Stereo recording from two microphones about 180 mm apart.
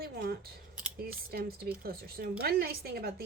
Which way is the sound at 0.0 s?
60° right (ahead or behind).